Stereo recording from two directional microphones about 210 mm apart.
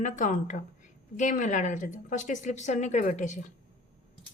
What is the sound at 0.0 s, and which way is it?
A woman's voice, 35° left (ahead or behind).